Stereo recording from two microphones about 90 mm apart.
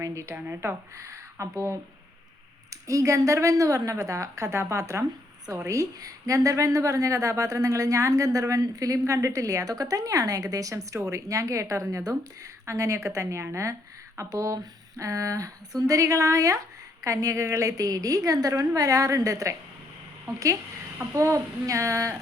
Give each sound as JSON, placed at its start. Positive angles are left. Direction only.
{"t": 0.0, "sound": "a woman's voice", "side_deg": -35}
{"t": 0.3, "sound": "a woman's voice", "side_deg": -25}
{"t": 2.8, "sound": "a woman's voice", "side_deg": -35}